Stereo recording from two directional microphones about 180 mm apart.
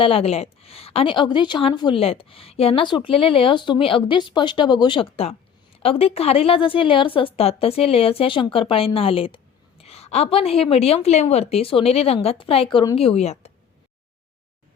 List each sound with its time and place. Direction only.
0.0 s a woman's voice: 30° left (ahead or behind)
13.0 s a woman's voice: 35° left (ahead or behind)